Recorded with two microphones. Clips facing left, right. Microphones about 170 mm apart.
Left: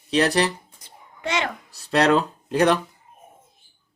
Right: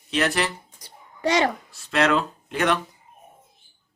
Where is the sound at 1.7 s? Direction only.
40° left (ahead or behind).